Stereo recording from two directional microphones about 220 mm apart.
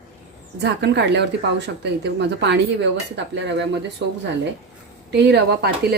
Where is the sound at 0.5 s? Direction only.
50° right (ahead or behind).